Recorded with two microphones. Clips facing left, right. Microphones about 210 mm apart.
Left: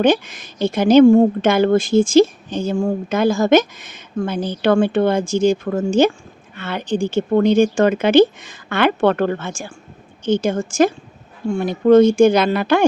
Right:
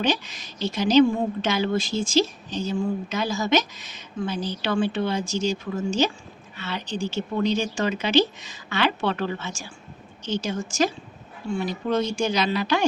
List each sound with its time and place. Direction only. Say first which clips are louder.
0.0 s a woman's voice: left 9 dB; 50° left (ahead or behind)